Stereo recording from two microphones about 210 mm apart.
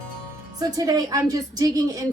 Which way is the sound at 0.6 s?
15° right (ahead or behind).